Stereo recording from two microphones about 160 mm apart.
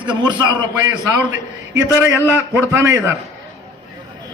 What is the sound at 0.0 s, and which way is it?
Speech, 30° right (ahead or behind).